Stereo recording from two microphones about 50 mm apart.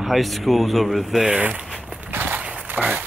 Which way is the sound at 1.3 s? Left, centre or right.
Right.